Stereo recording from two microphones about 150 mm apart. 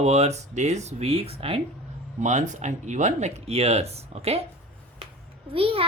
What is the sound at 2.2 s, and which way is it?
Speech, 55° right (ahead or behind).